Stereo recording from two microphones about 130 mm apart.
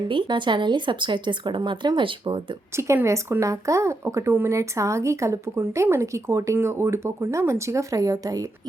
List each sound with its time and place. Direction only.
0.1 s speech: 40° right (ahead or behind)
2.7 s speech: 20° right (ahead or behind)